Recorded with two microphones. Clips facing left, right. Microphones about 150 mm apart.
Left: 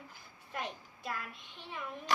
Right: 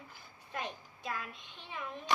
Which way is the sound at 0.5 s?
5° left (ahead or behind).